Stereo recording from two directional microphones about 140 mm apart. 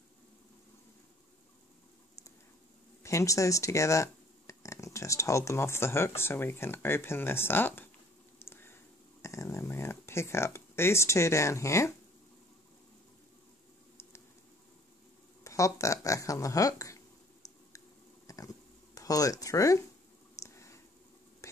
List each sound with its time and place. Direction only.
3.0 s speech: 20° left (ahead or behind)
8.4 s a sound: 15° left (ahead or behind)
15.4 s speech: 20° left (ahead or behind)
17.7 s squish: 25° left (ahead or behind)
18.9 s speech: 25° left (ahead or behind)
20.3 s a sound: 20° left (ahead or behind)